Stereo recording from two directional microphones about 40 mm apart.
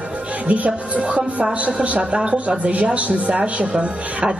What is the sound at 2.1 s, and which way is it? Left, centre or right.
Speech, right.